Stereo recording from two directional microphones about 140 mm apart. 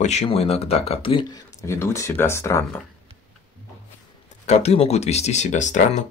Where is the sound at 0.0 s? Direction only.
55° left (ahead or behind).